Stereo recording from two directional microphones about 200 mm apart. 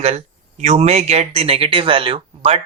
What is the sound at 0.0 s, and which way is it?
Speech, 30° right (ahead or behind).